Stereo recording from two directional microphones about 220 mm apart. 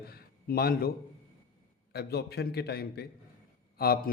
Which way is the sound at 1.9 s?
45° left (ahead or behind).